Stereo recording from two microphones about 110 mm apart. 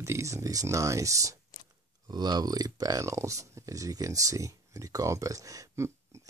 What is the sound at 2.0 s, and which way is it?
Speech, 40° right (ahead or behind).